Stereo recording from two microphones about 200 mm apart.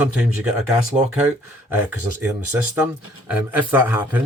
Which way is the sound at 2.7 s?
5° right (ahead or behind).